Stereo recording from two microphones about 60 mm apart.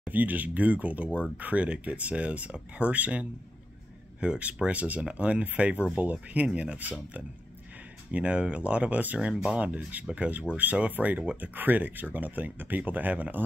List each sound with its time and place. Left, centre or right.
0.0 s speech: right
9.7 s speech: right